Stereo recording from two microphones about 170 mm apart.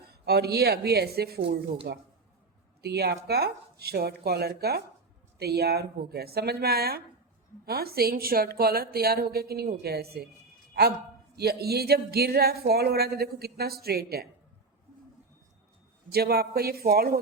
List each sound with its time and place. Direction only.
0.0 s a woman's voice: 70° right (ahead or behind)
11.3 s speech: 70° right (ahead or behind)
16.1 s a woman's voice: 65° right (ahead or behind)